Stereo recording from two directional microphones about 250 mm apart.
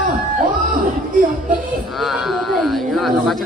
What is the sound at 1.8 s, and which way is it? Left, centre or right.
Speech, centre.